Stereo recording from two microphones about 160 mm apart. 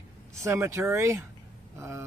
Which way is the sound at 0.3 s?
15° right (ahead or behind).